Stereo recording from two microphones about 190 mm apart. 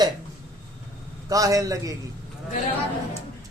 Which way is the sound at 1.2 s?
20° right (ahead or behind).